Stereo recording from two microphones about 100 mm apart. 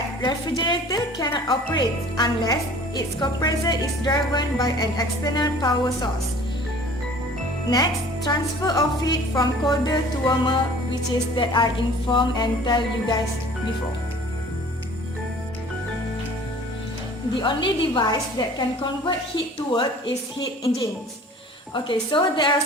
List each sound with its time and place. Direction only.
0.2 s a woman's voice: 50° left (ahead or behind)
7.7 s a woman's voice: 40° left (ahead or behind)
11.1 s a woman's voice: 45° left (ahead or behind)
17.4 s a woman's voice: 55° left (ahead or behind)
22.1 s a woman's voice: 50° left (ahead or behind)